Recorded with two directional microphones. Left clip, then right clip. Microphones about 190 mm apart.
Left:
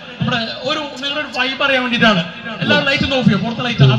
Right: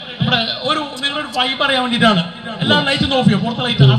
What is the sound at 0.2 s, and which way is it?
A man's voice, 25° right (ahead or behind).